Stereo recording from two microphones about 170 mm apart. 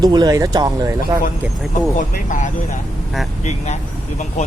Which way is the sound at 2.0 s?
50° left (ahead or behind).